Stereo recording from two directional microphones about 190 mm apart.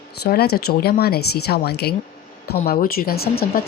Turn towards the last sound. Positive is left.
turn(degrees=55)  # may be behind; listen again after turning